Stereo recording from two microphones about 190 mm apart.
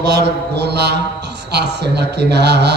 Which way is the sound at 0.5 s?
60° right (ahead or behind).